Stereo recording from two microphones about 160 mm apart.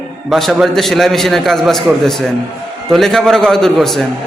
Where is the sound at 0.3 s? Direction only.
Centre (ahead or behind).